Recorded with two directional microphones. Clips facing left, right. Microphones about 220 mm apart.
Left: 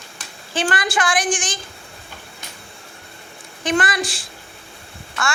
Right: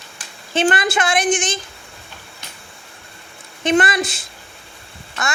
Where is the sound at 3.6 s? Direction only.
25° right (ahead or behind).